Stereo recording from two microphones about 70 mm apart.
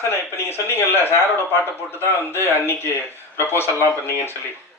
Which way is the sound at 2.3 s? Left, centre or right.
Left.